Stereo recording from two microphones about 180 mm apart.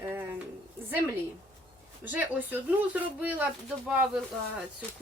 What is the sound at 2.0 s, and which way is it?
Speech, 10° right (ahead or behind).